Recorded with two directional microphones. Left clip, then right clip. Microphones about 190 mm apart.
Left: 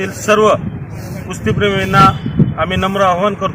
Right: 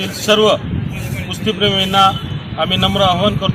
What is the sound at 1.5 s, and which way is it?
Speech, 35° left (ahead or behind).